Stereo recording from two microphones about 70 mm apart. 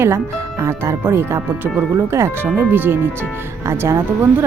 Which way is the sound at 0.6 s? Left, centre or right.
Right.